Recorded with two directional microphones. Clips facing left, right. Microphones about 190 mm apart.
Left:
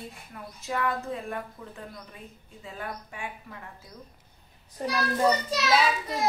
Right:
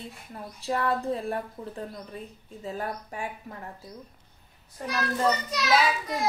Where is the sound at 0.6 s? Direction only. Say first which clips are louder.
Right 3 dB; 35° right (ahead or behind).